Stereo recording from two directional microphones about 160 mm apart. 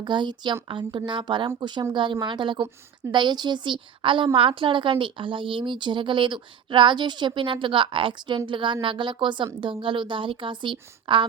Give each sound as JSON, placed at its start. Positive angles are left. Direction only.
{"t": 0.0, "sound": "a woman's voice", "side_deg": -30}